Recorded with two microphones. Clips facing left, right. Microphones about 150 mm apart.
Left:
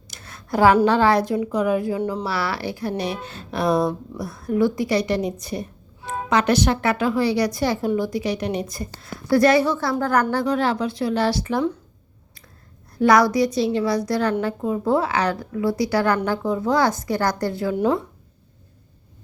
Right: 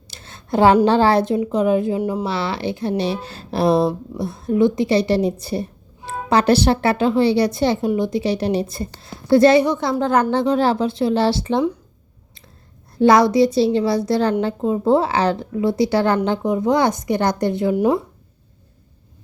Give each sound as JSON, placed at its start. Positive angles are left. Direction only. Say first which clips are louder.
{"t": 0.1, "sound": "a sound", "louder": "right 4 dB", "side_deg": -25}
{"t": 0.9, "sound": "speech", "louder": "right 2 dB", "side_deg": -30}
{"t": 2.0, "sound": "speech", "louder": "right 3 dB", "side_deg": -10}
{"t": 2.2, "sound": "speech", "louder": "right 3 dB", "side_deg": -25}
{"t": 13.0, "sound": "speech", "louder": "right 3 dB", "side_deg": -25}